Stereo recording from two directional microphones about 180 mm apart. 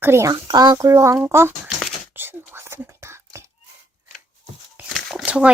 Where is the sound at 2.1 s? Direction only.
10° right (ahead or behind).